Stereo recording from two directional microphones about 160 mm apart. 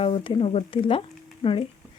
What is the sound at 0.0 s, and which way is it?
Speech, 30° left (ahead or behind).